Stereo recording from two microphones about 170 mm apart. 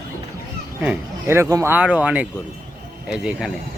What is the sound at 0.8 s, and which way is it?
Speech, 10° right (ahead or behind).